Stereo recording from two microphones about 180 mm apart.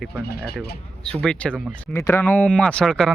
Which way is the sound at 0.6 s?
5° left (ahead or behind).